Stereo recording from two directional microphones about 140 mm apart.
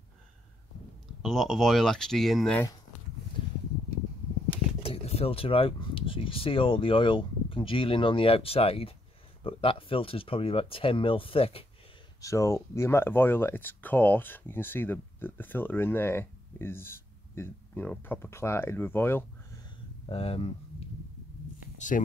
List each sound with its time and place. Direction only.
1.2 s speech: centre (ahead or behind)
4.8 s speech: 45° left (ahead or behind)
12.2 s speech: 20° left (ahead or behind)
20.1 s speech: 45° left (ahead or behind)
21.7 s speech: 65° left (ahead or behind)